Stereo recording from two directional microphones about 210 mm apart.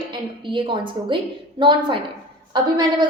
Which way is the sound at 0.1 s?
25° right (ahead or behind).